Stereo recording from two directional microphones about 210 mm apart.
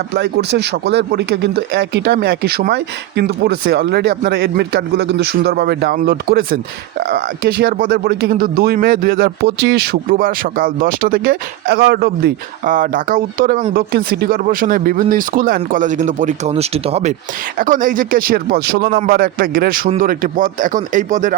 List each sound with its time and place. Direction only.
0.1 s speech: 55° right (ahead or behind); by 21.3 s 35° right (ahead or behind)